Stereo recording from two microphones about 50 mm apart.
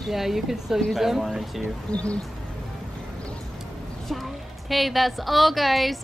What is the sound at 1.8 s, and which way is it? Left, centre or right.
Speech, left.